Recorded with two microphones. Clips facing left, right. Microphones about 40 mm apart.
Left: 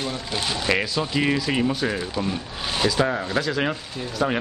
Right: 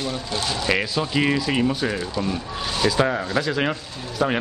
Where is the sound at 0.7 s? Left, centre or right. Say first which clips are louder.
Even; centre.